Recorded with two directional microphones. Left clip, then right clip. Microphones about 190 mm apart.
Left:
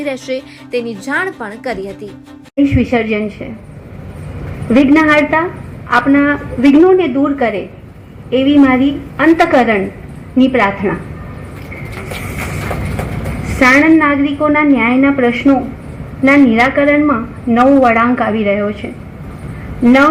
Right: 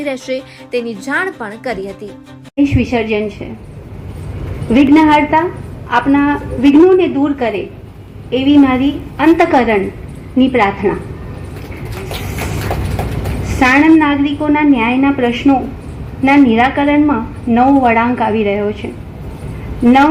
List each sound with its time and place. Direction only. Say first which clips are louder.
0.0 s a woman's voice: even; centre (ahead or behind)
2.6 s a woman's voice: left 2 dB; 30° left (ahead or behind)
4.7 s a woman's voice: even; 30° left (ahead or behind)
13.6 s a woman's voice: left 1 dB; 30° left (ahead or behind)